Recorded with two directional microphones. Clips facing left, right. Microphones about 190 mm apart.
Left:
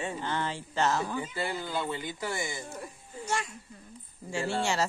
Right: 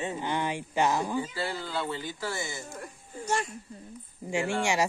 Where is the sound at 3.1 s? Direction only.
45° right (ahead or behind).